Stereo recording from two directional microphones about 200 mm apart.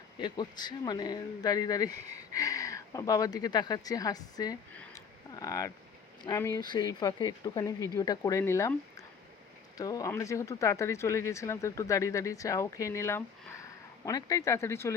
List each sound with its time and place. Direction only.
0.2 s speech: 20° left (ahead or behind)
4.9 s a sound: 15° left (ahead or behind)
6.2 s speech: 15° left (ahead or behind)